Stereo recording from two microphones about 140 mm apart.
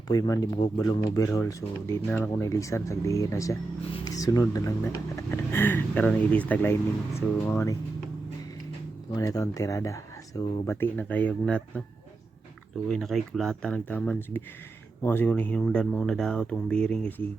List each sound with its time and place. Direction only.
0.1 s speech: 25° left (ahead or behind); by 2.3 s 10° left (ahead or behind)
2.3 s speech: 20° left (ahead or behind)
9.1 s speech: 25° left (ahead or behind); by 11.8 s 10° left (ahead or behind)
12.9 s speech: centre (ahead or behind)